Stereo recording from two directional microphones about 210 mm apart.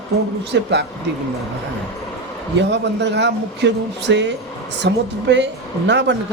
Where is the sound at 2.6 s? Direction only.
55° right (ahead or behind).